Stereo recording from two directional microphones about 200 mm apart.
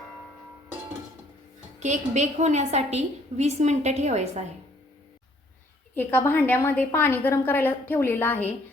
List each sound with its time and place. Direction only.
1.8 s a woman's voice: 35° right (ahead or behind)
5.9 s a woman's voice: 10° left (ahead or behind)